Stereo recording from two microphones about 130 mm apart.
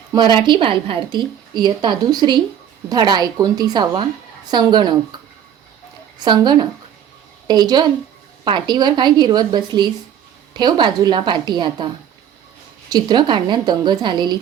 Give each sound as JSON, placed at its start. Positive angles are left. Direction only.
{"t": 0.1, "sound": "a woman's voice", "side_deg": -35}
{"t": 6.2, "sound": "a woman's voice", "side_deg": -35}
{"t": 12.9, "sound": "a woman's voice", "side_deg": -35}